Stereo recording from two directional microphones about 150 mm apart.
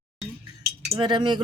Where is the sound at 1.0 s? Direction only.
30° right (ahead or behind).